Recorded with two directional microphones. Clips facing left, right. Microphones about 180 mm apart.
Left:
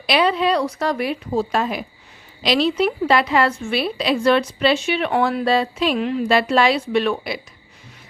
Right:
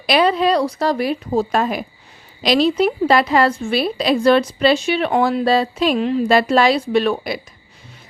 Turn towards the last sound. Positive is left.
turn(degrees=-40)  # may be behind; listen again after turning